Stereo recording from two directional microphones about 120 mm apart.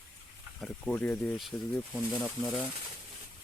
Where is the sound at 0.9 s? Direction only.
10° left (ahead or behind).